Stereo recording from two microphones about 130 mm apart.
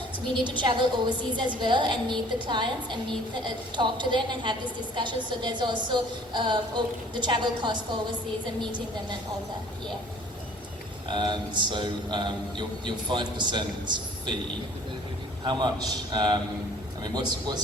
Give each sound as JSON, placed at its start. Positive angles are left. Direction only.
{"t": 0.4, "sound": "a man's voice", "side_deg": -35}
{"t": 11.1, "sound": "a man's voice", "side_deg": -35}
{"t": 15.4, "sound": "a man's voice", "side_deg": -35}